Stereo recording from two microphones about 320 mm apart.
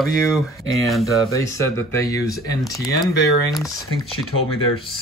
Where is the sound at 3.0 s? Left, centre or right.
Centre.